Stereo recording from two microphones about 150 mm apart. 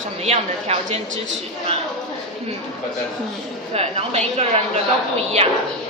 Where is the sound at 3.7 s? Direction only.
45° right (ahead or behind).